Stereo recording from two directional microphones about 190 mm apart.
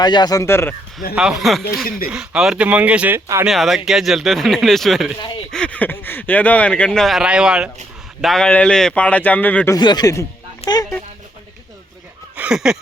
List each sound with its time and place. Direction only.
0.0 s speech: 20° left (ahead or behind)
1.1 s speech: 5° right (ahead or behind)
3.5 s speech: centre (ahead or behind)
9.7 s speech: 20° left (ahead or behind)
12.4 s a sound: 5° right (ahead or behind)